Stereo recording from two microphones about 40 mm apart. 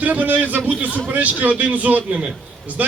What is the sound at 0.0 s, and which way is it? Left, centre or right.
A man's voice, right.